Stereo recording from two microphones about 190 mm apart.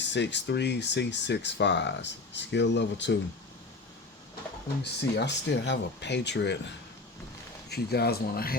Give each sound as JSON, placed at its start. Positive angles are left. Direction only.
{"t": 0.0, "sound": "speech", "side_deg": 70}
{"t": 4.8, "sound": "speech", "side_deg": 65}
{"t": 7.7, "sound": "speech", "side_deg": 55}